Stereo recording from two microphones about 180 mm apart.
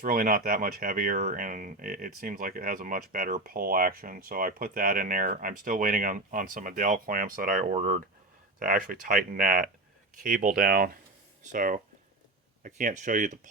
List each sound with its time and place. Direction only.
0.0 s speech: 55° right (ahead or behind)